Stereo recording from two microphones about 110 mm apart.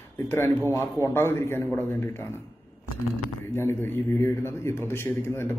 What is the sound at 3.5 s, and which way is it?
A man's voice, 20° left (ahead or behind).